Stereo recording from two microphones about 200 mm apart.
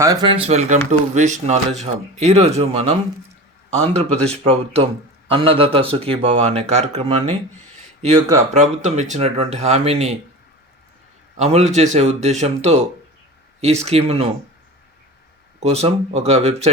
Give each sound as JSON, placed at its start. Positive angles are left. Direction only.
{"t": 0.0, "sound": "a man's voice", "side_deg": -20}
{"t": 8.5, "sound": "speech", "side_deg": -35}
{"t": 11.3, "sound": "speech", "side_deg": -35}
{"t": 13.8, "sound": "a man's voice", "side_deg": -30}
{"t": 15.6, "sound": "speech", "side_deg": -30}